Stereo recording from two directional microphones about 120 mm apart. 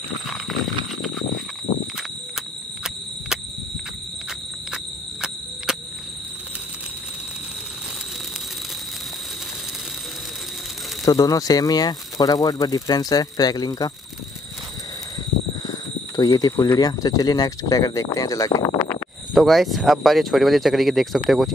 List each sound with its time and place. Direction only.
5.7 s cricket: 5° right (ahead or behind)
11.1 s speech: 30° left (ahead or behind)
16.2 s speech: 35° left (ahead or behind)
19.3 s speech: centre (ahead or behind)